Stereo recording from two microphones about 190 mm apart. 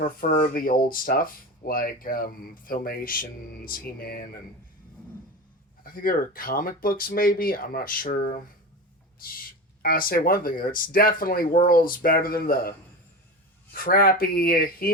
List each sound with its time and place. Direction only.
0.0 s speech: 50° left (ahead or behind)
5.8 s speech: 50° left (ahead or behind)
9.8 s speech: 50° left (ahead or behind)
13.7 s speech: 50° left (ahead or behind)